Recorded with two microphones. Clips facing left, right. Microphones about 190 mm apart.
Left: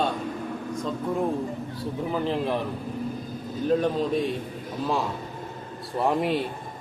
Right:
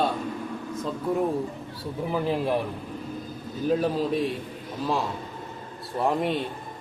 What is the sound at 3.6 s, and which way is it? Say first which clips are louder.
A man's voice: left 1 dB; 5° right (ahead or behind).